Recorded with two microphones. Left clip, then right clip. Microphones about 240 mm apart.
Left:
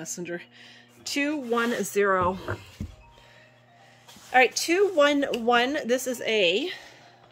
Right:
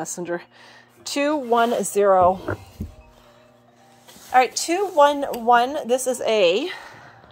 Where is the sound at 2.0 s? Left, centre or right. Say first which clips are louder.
Right 8 dB; left.